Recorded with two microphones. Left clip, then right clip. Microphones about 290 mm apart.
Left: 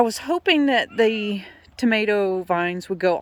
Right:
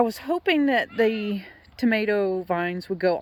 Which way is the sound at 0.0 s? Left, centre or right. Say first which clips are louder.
Left 3 dB; centre.